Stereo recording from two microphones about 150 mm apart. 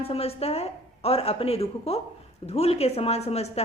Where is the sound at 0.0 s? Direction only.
40° left (ahead or behind).